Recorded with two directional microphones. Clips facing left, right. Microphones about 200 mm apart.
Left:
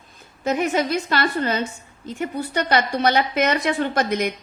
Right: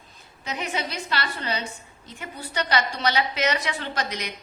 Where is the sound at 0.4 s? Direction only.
50° left (ahead or behind).